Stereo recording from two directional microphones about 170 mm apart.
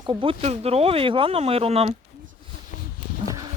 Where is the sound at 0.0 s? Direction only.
30° right (ahead or behind).